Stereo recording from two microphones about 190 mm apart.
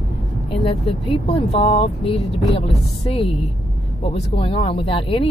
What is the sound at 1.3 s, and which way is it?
Speech, 30° left (ahead or behind).